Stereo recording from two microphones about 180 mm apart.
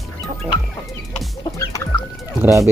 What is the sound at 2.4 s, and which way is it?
Speech, 15° right (ahead or behind).